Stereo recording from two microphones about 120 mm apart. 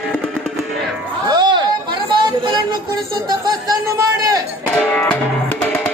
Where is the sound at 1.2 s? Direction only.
35° right (ahead or behind).